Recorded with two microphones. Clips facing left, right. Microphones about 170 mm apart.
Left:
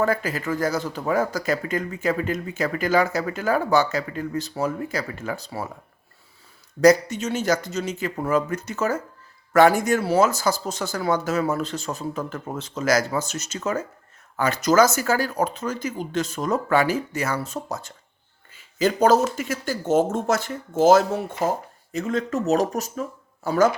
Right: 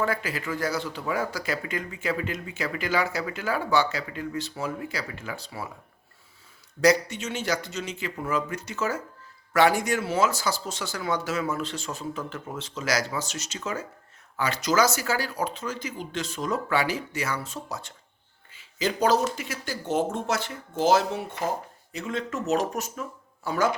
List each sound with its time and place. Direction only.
0.0 s speech: 45° left (ahead or behind)
6.8 s speech: 40° left (ahead or behind)